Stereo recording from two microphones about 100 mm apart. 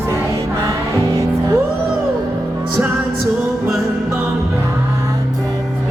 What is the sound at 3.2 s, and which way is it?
Music, centre (ahead or behind).